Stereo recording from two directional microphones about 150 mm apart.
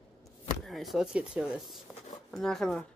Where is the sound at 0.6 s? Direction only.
Centre (ahead or behind).